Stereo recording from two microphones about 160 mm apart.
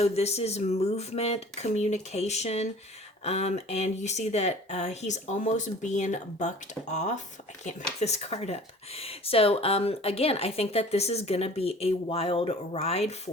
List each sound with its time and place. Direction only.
0.0 s speech: 40° left (ahead or behind)